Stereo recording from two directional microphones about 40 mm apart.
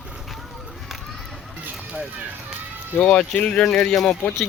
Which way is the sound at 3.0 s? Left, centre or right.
Left.